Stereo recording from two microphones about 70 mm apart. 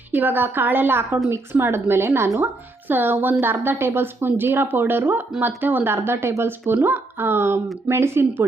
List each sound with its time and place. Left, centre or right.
0.1 s speech: right